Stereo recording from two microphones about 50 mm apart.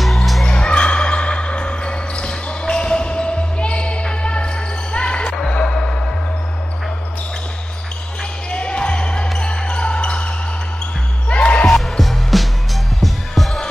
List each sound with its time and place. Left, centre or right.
0.0 s music: centre
0.5 s basketball bounce: left
4.9 s music: left
8.5 s basketball bounce: left
11.2 s music: left
11.8 s music: centre